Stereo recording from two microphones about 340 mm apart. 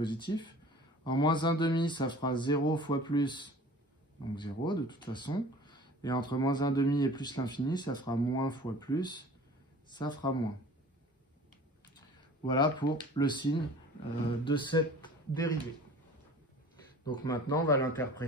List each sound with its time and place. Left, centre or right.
0.0 s speech: centre
12.4 s speech: centre
17.0 s speech: centre